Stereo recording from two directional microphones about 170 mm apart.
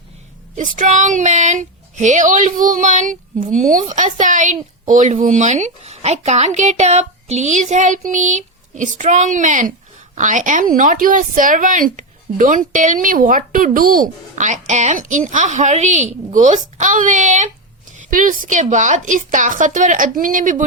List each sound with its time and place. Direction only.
0.5 s speech: 50° right (ahead or behind)